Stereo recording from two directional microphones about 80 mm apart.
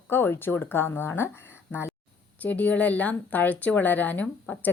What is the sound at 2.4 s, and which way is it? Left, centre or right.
A woman's voice, centre.